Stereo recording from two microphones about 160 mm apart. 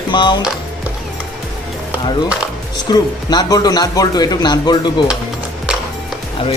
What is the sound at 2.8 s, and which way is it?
Speech, 25° left (ahead or behind).